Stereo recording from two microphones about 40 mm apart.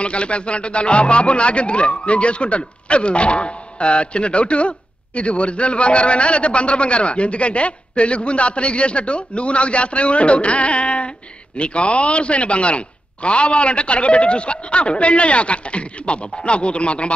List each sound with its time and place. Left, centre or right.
0.0 s speech: left